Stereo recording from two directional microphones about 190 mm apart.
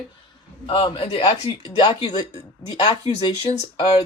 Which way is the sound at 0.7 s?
25° left (ahead or behind).